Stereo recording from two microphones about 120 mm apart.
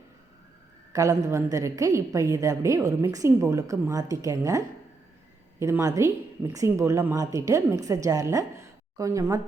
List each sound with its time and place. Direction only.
0.9 s a woman's voice: 25° right (ahead or behind)